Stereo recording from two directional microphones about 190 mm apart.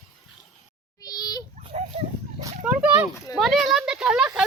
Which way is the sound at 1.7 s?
35° right (ahead or behind).